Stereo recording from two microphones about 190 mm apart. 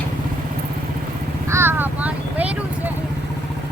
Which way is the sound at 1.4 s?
15° right (ahead or behind).